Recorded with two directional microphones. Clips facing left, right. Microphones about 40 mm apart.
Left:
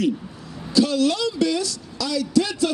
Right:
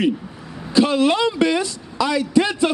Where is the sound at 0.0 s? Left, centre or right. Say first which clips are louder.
Right 3 dB; right.